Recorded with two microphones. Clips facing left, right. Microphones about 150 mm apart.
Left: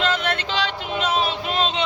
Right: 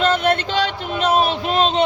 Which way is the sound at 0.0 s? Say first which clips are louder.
Right 6 dB; 50° right (ahead or behind).